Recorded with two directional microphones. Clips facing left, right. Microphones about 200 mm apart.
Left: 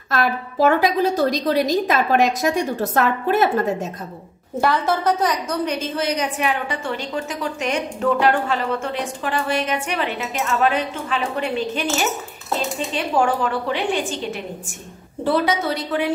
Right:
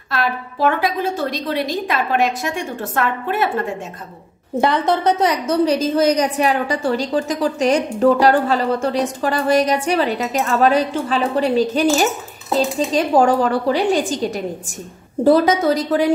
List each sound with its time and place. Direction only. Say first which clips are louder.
0.1 s a woman's voice: left 1 dB; 45° left (ahead or behind)
4.6 s a woman's voice: right 3 dB; 20° right (ahead or behind)
5.8 s a woman's voice: right 7 dB; 40° right (ahead or behind)